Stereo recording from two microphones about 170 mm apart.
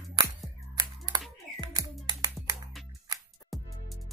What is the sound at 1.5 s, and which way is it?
Music, 20° right (ahead or behind).